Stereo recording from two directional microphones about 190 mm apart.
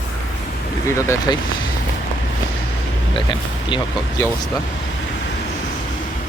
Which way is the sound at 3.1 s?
25° left (ahead or behind).